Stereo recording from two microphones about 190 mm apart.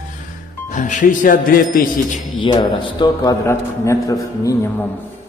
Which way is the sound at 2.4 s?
25° left (ahead or behind).